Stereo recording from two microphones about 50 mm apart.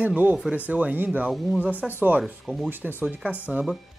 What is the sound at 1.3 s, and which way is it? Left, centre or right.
Speech, centre.